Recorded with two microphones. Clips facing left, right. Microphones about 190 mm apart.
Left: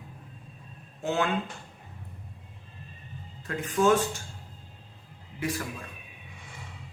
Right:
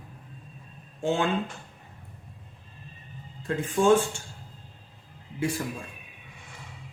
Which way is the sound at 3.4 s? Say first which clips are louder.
Right 2 dB; 30° right (ahead or behind).